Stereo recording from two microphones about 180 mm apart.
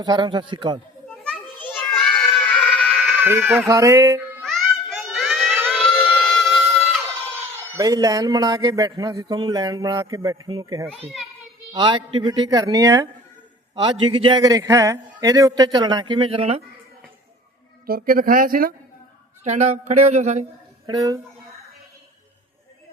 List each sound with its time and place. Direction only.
0.0 s speech: 25° right (ahead or behind)
1.2 s children playing: 5° left (ahead or behind)
1.7 s a sound: 5° left (ahead or behind)
3.0 s a sound: 10° right (ahead or behind)
4.4 s a sound: centre (ahead or behind)
5.8 s wind instrument: 5° left (ahead or behind)
7.8 s speech: 20° right (ahead or behind)
10.8 s a child's voice: 5° left (ahead or behind)
11.7 s speech: 25° right (ahead or behind)
13.8 s speech: 30° right (ahead or behind)
17.8 s speech: 55° right (ahead or behind)
19.5 s a sound: 40° right (ahead or behind)
20.8 s speech: 20° right (ahead or behind)